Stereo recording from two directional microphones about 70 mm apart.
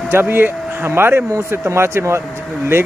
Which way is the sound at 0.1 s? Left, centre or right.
Right.